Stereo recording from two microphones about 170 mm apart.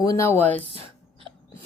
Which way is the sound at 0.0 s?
20° left (ahead or behind).